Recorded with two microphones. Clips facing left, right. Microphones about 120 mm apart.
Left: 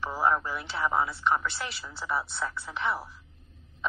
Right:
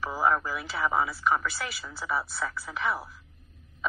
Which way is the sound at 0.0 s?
Centre (ahead or behind).